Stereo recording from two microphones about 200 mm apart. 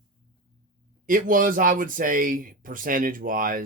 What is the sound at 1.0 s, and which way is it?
Speech, 45° right (ahead or behind).